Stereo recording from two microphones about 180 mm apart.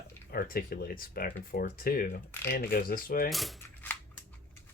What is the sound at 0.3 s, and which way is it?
Speech, 55° left (ahead or behind).